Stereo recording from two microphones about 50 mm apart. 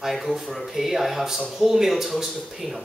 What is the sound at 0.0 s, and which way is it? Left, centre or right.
Speech, centre.